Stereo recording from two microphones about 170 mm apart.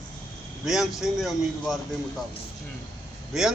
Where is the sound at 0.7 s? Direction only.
Centre (ahead or behind).